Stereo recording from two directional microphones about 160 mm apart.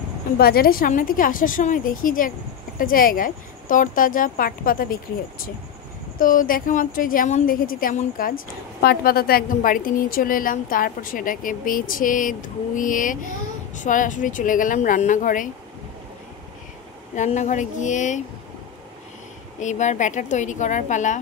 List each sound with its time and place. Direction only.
0.4 s a woman's voice: 70° left (ahead or behind)
6.1 s a woman's voice: 60° left (ahead or behind)
8.8 s a woman's voice: 70° left (ahead or behind); by 15.4 s 55° left (ahead or behind)
17.1 s a woman's voice: 50° left (ahead or behind)
19.6 s a woman's voice: 50° left (ahead or behind)